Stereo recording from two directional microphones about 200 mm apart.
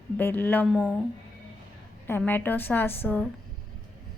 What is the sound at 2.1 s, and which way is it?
A woman's voice, 10° left (ahead or behind).